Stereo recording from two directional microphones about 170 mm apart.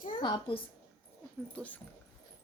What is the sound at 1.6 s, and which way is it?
Speech, 10° left (ahead or behind).